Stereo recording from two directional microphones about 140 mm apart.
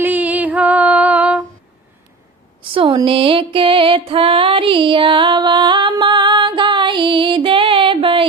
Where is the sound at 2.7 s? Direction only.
40° right (ahead or behind).